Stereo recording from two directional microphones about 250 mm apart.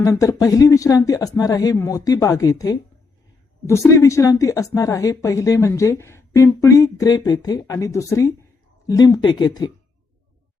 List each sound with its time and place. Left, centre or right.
0.0 s a woman's voice: centre